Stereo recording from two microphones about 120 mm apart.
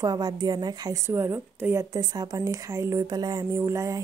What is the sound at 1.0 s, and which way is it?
Speech, 20° right (ahead or behind).